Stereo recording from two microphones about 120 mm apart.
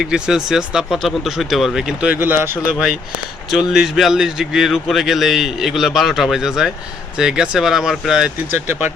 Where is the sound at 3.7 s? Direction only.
5° right (ahead or behind).